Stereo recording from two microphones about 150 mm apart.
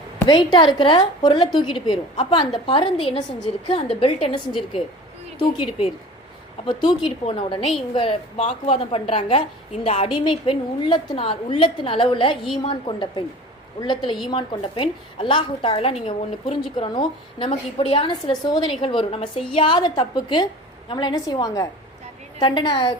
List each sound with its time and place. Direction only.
0.3 s a woman's voice: 30° left (ahead or behind)
5.4 s a woman's voice: 30° left (ahead or behind)